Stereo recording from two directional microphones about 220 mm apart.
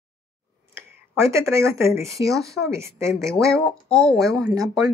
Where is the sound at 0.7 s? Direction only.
10° right (ahead or behind).